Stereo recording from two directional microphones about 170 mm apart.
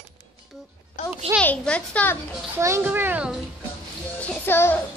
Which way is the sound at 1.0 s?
50° left (ahead or behind).